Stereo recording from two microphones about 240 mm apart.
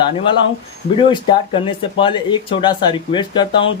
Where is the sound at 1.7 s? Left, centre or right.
Left.